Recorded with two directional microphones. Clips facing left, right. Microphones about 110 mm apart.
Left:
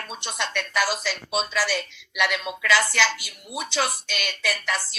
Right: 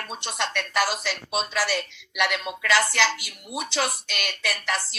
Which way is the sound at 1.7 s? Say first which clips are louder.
Even; 45° right (ahead or behind).